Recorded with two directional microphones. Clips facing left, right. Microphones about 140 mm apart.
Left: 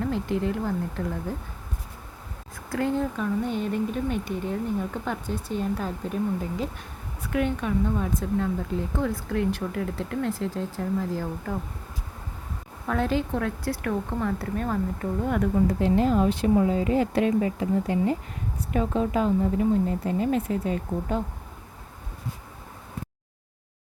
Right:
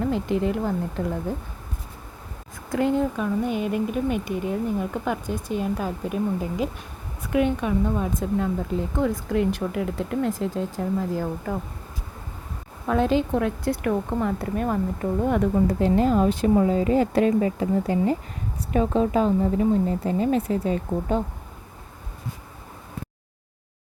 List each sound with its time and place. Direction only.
0.0 s speech: 20° right (ahead or behind)
2.6 s speech: 15° right (ahead or behind)
12.9 s speech: 20° right (ahead or behind)
15.2 s speech: 30° right (ahead or behind)
16.0 s speech: 45° right (ahead or behind); by 21.2 s 30° right (ahead or behind)